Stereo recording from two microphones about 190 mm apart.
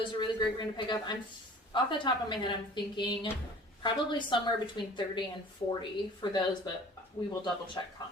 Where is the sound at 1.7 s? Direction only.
25° left (ahead or behind).